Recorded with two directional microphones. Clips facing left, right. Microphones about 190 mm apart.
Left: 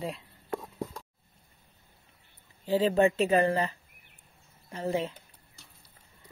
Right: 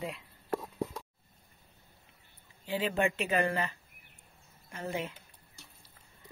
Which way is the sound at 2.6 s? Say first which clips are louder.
Left 7 dB; 35° left (ahead or behind).